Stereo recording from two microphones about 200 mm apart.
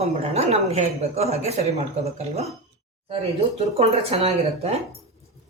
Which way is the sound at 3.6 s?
30° right (ahead or behind).